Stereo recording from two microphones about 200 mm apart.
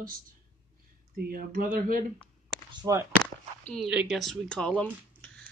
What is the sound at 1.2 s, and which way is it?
Speech, 45° right (ahead or behind).